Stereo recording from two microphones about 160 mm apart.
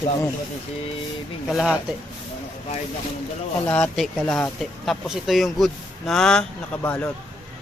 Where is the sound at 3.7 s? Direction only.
10° left (ahead or behind).